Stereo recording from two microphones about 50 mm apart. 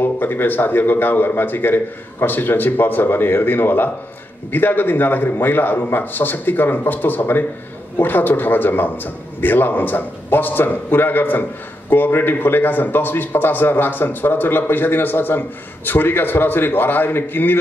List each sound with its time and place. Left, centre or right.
0.0 s a man's voice: left